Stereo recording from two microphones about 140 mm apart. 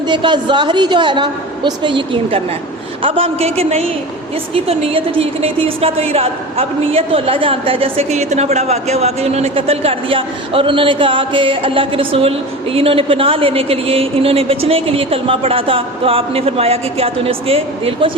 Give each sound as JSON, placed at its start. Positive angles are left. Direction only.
{"t": 0.1, "sound": "a woman's voice", "side_deg": -35}